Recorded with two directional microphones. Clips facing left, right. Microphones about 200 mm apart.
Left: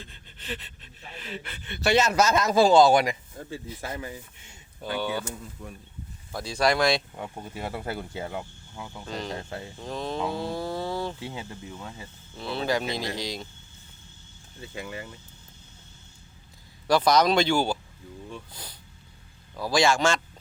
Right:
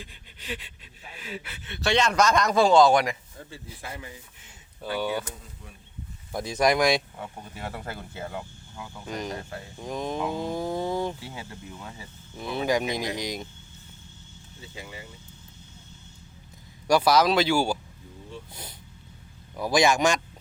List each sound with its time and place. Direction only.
0.0 s speech: 10° right (ahead or behind)
3.5 s speech: 45° left (ahead or behind)
4.4 s speech: 5° right (ahead or behind)
6.3 s speech: 20° right (ahead or behind)
7.2 s speech: 15° left (ahead or behind)
9.0 s speech: 15° right (ahead or behind)
11.2 s speech: 20° left (ahead or behind)
11.8 s speech: 5° right (ahead or behind)
14.8 s speech: 55° left (ahead or behind)
16.8 s speech: 10° right (ahead or behind)
18.5 s speech: 25° right (ahead or behind)